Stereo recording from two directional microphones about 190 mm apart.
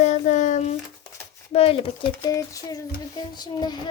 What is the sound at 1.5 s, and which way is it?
Speech, 30° left (ahead or behind).